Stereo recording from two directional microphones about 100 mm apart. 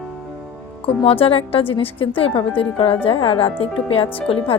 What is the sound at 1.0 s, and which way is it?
Speech, 70° left (ahead or behind).